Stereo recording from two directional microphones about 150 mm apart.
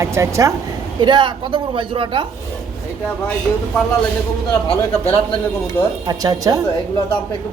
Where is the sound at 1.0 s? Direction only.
30° right (ahead or behind).